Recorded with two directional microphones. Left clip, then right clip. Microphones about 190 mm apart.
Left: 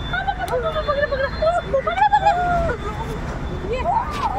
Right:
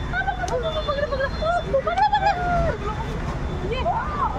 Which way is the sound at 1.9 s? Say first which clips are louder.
Left 4 dB; 15° left (ahead or behind).